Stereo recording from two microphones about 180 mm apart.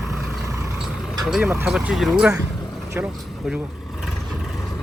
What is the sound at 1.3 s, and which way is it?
Speech, 10° right (ahead or behind).